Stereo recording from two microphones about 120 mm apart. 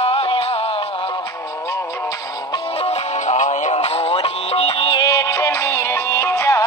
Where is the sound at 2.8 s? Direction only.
70° left (ahead or behind); by 4.9 s 50° left (ahead or behind).